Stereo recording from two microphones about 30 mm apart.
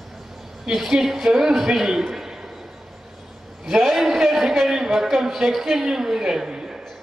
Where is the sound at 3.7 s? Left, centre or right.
Centre.